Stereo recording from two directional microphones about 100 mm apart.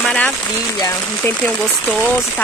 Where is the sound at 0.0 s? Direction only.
5° left (ahead or behind).